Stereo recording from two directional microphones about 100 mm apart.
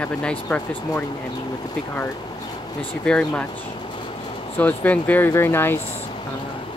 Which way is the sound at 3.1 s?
10° left (ahead or behind).